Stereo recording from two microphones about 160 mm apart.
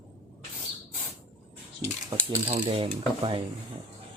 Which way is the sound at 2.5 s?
35° right (ahead or behind).